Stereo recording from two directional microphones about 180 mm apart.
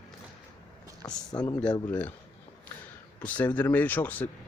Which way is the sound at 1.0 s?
20° left (ahead or behind).